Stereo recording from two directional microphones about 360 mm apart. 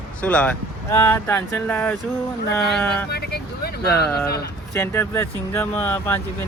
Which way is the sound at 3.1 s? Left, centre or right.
Left.